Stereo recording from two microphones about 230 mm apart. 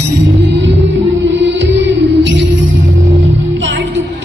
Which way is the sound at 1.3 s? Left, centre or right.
Right.